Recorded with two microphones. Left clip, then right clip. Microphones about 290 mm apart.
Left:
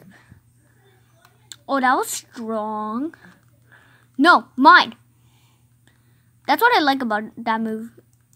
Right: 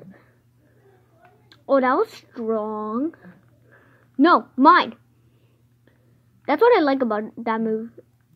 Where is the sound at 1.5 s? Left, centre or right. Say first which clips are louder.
Even; left.